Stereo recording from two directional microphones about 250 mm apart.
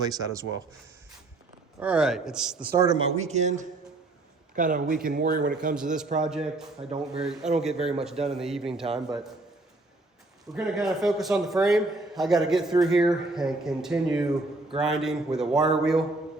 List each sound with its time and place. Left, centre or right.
0.0 s speech: centre
1.8 s a man's voice: centre
2.7 s speech: centre
3.2 s a man's voice: right
6.2 s a man's voice: centre
10.5 s a man's voice: centre